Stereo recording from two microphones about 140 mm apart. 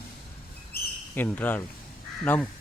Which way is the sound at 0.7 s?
90° left.